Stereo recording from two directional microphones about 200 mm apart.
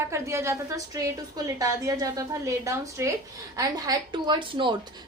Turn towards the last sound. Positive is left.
turn(degrees=-20)  # may be behind; listen again after turning